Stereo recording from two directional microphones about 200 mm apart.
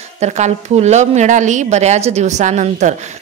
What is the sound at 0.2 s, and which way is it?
A woman's voice, 35° right (ahead or behind).